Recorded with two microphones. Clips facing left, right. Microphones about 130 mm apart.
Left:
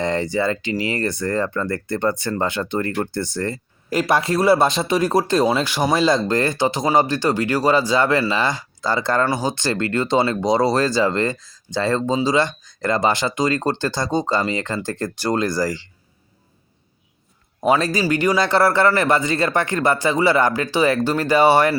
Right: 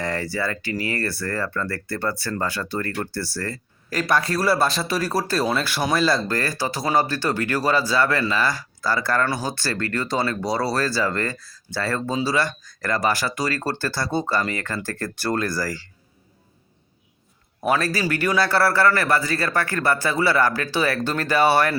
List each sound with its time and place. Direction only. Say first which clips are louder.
0.0 s a man's voice: left 5 dB; 20° left (ahead or behind)
17.6 s a man's voice: left 4 dB; 20° left (ahead or behind)